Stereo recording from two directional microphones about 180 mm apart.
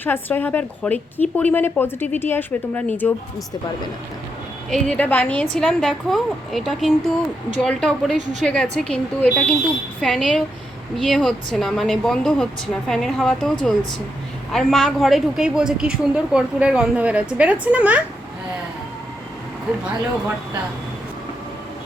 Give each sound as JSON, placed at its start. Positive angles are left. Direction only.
{"t": 0.0, "sound": "a woman's voice", "side_deg": 10}
{"t": 4.7, "sound": "a woman's voice", "side_deg": 10}